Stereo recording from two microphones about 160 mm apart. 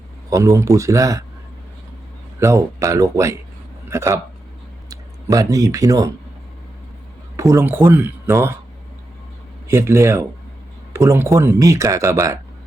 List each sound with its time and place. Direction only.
0.3 s speech: 20° right (ahead or behind)
2.4 s speech: 20° right (ahead or behind)
7.3 s speech: 20° right (ahead or behind)
9.6 s speech: 15° right (ahead or behind)